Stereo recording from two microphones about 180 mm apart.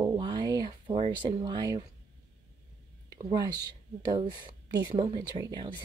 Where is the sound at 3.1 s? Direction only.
25° right (ahead or behind).